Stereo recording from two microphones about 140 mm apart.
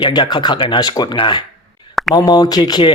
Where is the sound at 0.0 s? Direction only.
30° left (ahead or behind).